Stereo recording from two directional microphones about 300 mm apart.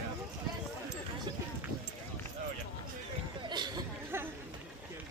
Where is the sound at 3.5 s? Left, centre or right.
Centre.